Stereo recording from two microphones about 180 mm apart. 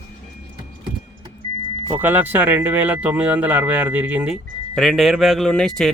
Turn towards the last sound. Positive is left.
turn(degrees=0)  # may be behind; listen again after turning